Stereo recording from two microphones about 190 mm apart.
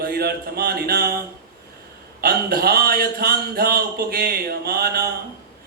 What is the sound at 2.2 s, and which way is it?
A man's voice, 55° right (ahead or behind).